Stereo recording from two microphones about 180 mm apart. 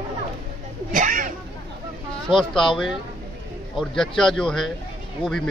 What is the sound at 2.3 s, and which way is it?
Speech, 5° left (ahead or behind).